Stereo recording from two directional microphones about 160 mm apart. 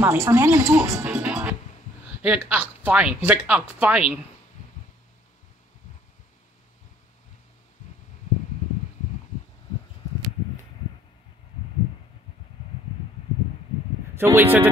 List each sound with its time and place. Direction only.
0.0 s speech: 15° right (ahead or behind)
14.1 s speech: 15° right (ahead or behind)